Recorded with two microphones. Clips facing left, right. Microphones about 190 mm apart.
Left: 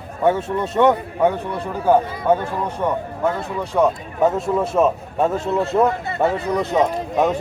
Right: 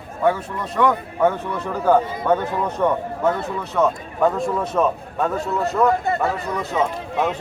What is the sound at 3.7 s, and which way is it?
Speech, 20° left (ahead or behind).